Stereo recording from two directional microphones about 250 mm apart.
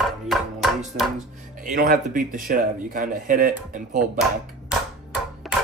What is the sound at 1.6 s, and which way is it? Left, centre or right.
Speech, right.